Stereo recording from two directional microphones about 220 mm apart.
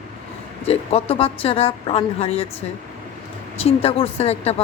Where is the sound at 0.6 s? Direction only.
25° left (ahead or behind).